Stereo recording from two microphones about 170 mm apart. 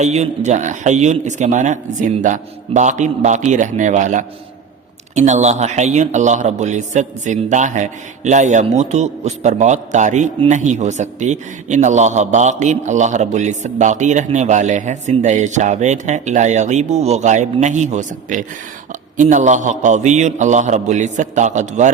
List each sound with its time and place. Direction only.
0.0 s a man's voice: 40° right (ahead or behind)